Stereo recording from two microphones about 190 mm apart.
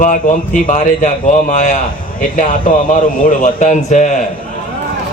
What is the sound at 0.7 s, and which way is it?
A man's voice, 40° left (ahead or behind).